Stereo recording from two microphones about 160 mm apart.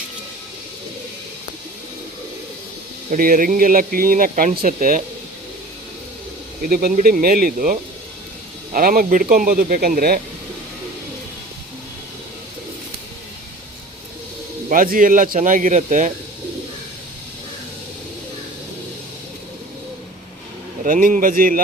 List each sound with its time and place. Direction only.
3.1 s speech: 60° right (ahead or behind)
6.6 s speech: 65° right (ahead or behind)
14.7 s speech: 60° right (ahead or behind)
20.8 s speech: 55° right (ahead or behind)